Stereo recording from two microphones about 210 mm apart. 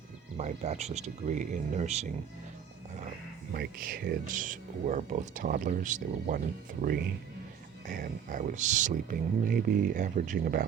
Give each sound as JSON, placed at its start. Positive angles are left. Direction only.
{"t": 0.3, "sound": "speech", "side_deg": -30}
{"t": 3.5, "sound": "speech", "side_deg": -45}
{"t": 7.9, "sound": "speech", "side_deg": -40}